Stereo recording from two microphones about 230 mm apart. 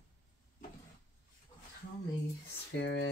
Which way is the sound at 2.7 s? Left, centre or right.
Left.